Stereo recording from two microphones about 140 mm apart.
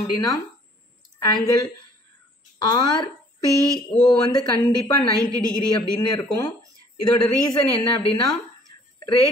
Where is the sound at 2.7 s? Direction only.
30° left (ahead or behind).